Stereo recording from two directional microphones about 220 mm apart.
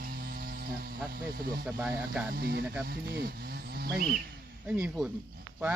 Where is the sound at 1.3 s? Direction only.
45° right (ahead or behind).